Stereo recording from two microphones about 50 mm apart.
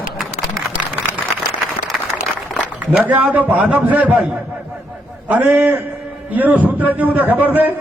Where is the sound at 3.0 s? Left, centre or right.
Right.